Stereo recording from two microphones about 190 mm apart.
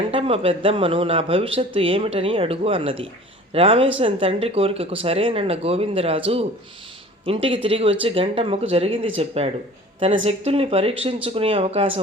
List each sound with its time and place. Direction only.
0.1 s speech: 30° right (ahead or behind)